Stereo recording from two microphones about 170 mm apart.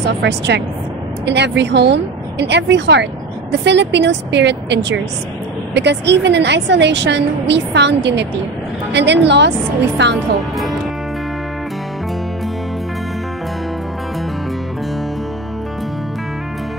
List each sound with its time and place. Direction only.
0.0 s a woman's voice: 90° right